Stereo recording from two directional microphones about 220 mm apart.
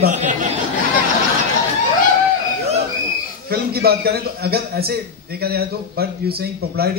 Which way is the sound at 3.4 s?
45° right (ahead or behind).